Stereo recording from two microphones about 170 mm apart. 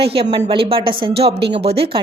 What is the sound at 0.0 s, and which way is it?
A woman's voice, 35° right (ahead or behind).